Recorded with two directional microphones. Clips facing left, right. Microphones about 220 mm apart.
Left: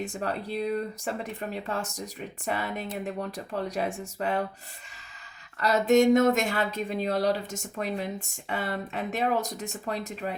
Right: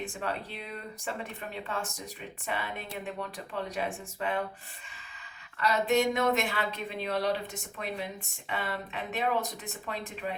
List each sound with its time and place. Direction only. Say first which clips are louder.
0.0 s speech: left 4 dB; 40° left (ahead or behind)
5.5 s speech: left 6 dB; 45° left (ahead or behind)